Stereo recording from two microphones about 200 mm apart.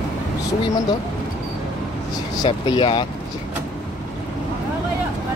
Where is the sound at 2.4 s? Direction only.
25° left (ahead or behind).